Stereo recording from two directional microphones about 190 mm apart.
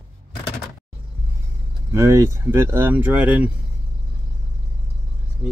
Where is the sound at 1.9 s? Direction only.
15° right (ahead or behind).